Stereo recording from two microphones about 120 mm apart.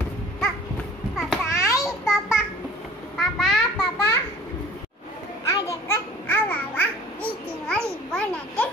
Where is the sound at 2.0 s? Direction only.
Centre (ahead or behind).